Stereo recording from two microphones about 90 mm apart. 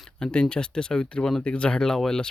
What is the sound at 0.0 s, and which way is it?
Speech, 10° left (ahead or behind).